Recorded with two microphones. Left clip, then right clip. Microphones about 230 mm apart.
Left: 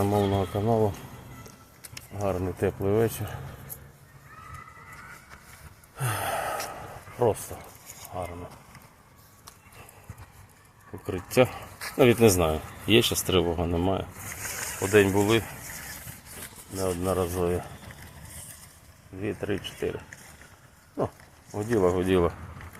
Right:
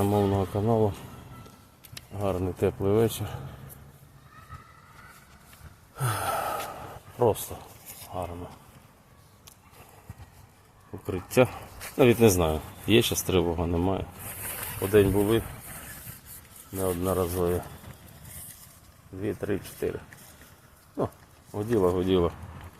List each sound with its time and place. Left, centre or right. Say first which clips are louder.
0.0 s speech: even; centre
6.0 s gasp: right 1 dB; centre
7.2 s speech: right 1 dB; centre
11.0 s speech: even; centre
16.7 s speech: even; centre
19.2 s speech: even; centre
21.8 s speech: left 1 dB; centre